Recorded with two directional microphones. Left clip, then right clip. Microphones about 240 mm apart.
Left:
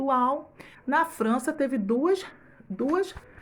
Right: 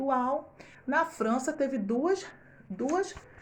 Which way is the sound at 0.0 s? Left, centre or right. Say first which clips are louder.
Left 4 dB; left.